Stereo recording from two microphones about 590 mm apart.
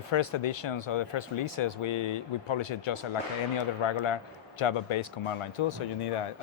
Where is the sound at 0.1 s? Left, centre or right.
Left.